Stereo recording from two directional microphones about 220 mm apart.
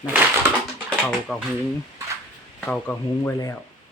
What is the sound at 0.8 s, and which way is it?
Speech, 5° left (ahead or behind).